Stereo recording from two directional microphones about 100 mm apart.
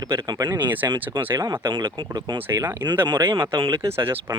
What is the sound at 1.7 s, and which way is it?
Speech, 50° right (ahead or behind).